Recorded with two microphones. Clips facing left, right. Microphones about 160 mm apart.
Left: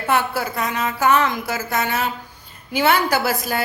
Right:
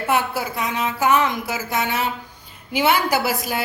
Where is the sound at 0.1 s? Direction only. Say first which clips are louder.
Left 2 dB; 15° right (ahead or behind).